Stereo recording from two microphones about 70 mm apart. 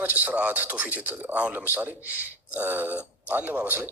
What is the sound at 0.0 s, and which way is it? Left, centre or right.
A man's voice, right.